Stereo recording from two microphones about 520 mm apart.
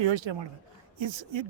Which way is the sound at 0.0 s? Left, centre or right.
Right.